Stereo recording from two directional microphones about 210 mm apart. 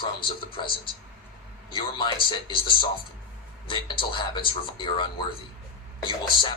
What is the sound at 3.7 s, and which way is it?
A man's voice, 25° left (ahead or behind).